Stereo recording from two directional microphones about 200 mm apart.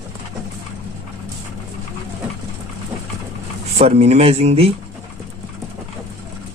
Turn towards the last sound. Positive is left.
turn(degrees=-30)  # may be behind; listen again after turning